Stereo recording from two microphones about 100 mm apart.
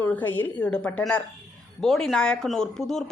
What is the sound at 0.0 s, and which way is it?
A woman's voice, 20° left (ahead or behind).